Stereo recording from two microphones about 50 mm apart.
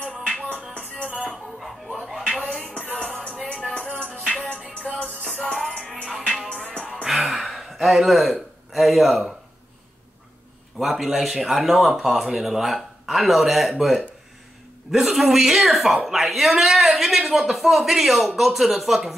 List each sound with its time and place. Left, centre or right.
1.0 s music: right
1.3 s music: centre
2.0 s a sound: centre
3.0 s music: centre
4.0 s music: centre
5.4 s music: centre
6.5 s music: left
7.1 s a sound: centre
10.8 s a woman's voice: centre